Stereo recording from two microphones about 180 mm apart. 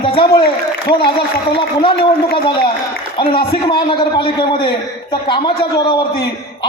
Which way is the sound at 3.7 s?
25° left (ahead or behind).